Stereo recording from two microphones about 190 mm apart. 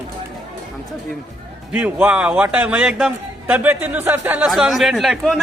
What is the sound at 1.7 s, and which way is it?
A man's voice, 5° right (ahead or behind).